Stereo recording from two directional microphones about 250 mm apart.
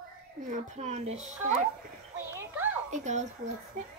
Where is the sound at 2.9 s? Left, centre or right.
Right.